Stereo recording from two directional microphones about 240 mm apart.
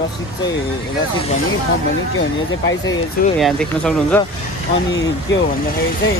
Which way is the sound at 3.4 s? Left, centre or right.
Centre.